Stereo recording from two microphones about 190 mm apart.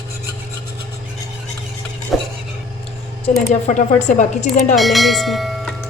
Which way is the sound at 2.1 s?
Centre (ahead or behind).